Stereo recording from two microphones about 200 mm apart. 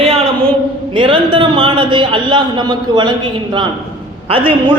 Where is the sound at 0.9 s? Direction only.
25° right (ahead or behind).